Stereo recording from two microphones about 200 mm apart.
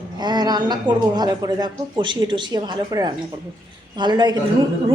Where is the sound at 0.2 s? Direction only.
20° right (ahead or behind).